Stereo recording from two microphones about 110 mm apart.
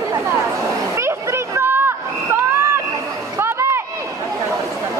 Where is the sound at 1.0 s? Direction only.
25° right (ahead or behind).